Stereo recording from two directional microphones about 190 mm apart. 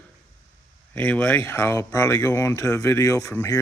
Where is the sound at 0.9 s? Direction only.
10° left (ahead or behind).